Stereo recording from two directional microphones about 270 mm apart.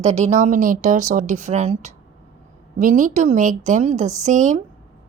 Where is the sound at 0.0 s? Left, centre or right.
Right.